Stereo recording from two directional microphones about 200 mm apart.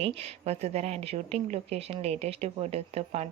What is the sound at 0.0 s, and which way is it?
A woman's voice, 30° right (ahead or behind).